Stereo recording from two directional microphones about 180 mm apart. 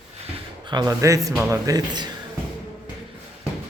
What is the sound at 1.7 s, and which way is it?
Speech, 25° right (ahead or behind).